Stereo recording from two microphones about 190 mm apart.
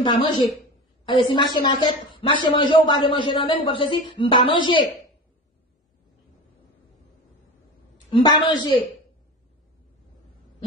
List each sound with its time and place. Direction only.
0.0 s speech: 25° left (ahead or behind)
8.1 s speech: 20° left (ahead or behind)